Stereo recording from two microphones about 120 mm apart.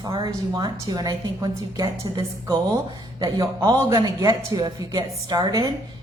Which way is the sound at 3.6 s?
35° right (ahead or behind).